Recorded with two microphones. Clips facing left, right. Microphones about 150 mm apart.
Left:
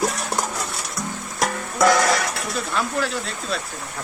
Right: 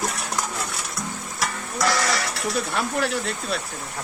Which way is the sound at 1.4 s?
50° left (ahead or behind).